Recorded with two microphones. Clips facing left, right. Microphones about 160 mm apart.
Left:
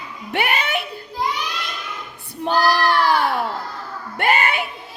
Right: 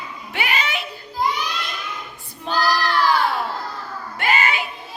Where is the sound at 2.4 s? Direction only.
55° left (ahead or behind).